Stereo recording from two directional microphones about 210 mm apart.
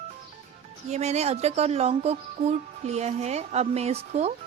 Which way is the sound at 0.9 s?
30° right (ahead or behind).